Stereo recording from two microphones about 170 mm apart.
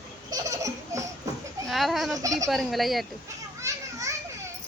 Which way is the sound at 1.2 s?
20° right (ahead or behind).